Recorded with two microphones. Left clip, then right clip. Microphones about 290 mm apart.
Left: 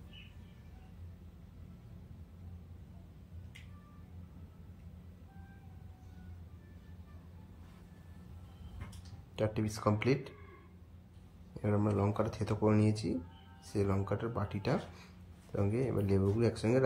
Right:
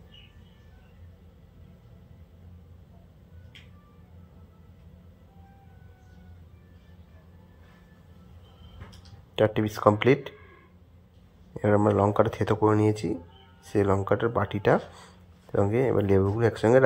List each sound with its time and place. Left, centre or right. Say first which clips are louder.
9.4 s speech: right 13 dB; right
11.6 s speech: right 12 dB; right